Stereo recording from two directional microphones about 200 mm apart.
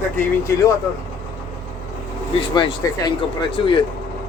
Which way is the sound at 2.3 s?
25° left (ahead or behind).